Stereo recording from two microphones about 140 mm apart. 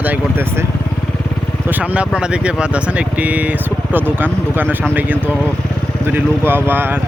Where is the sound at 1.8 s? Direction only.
10° right (ahead or behind).